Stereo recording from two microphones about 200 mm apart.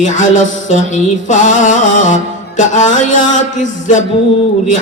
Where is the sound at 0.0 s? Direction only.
40° left (ahead or behind).